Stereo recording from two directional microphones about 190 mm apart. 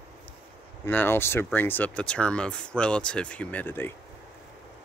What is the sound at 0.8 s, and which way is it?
Speech, 10° left (ahead or behind).